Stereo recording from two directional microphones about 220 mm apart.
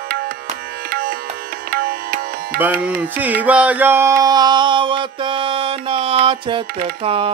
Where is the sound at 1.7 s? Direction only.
45° right (ahead or behind).